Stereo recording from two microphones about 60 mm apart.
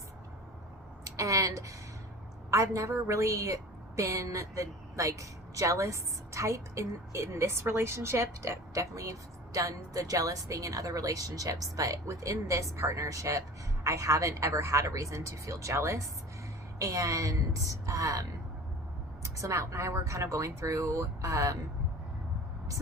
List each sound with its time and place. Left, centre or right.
1.0 s a sound: right
2.5 s a woman's voice: right
16.7 s a woman's voice: right
19.4 s a woman's voice: right